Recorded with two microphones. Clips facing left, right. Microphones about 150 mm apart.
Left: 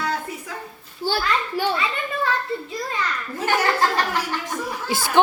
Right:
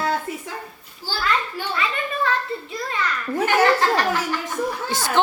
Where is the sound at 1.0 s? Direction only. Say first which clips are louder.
Left 8 dB; 60° left (ahead or behind).